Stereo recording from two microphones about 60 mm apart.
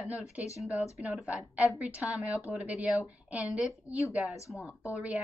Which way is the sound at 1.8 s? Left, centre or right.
Right.